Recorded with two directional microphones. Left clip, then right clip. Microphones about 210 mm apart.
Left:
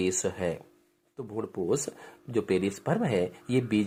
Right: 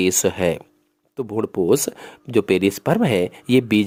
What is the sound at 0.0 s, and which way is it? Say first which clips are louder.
Speech: right 10 dB; 45° right (ahead or behind).